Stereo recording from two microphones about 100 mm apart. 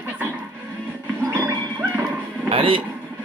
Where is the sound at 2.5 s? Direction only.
65° right (ahead or behind).